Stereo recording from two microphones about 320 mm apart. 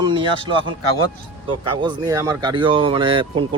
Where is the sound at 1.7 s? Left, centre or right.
Centre.